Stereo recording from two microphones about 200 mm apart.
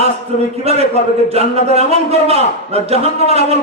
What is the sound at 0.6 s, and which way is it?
A man's voice, 30° right (ahead or behind).